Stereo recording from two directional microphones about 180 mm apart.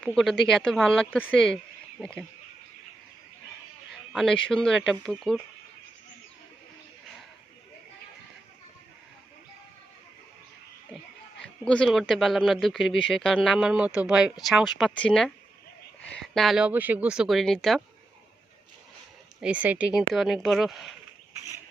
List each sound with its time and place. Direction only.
0.0 s speech: centre (ahead or behind)
4.1 s speech: 5° left (ahead or behind)
11.3 s speech: 5° left (ahead or behind)
19.4 s speech: 10° right (ahead or behind)